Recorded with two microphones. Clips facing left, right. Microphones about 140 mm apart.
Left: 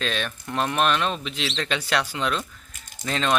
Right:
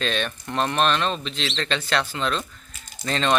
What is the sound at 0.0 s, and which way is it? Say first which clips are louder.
Speech: right 2 dB; centre (ahead or behind).